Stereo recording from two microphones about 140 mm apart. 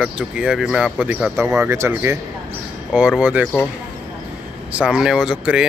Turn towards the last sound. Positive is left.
turn(degrees=-5)  # may be behind; listen again after turning